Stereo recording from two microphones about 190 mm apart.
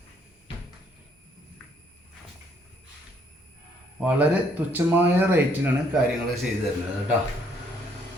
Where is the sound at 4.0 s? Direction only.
5° right (ahead or behind).